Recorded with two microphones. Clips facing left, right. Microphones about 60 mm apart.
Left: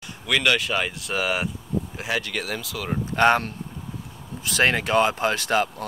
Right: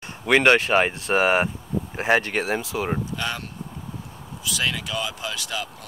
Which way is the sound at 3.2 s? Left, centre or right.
Left.